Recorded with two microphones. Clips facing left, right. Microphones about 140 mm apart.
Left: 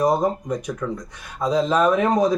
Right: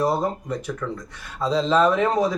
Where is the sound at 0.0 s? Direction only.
15° left (ahead or behind).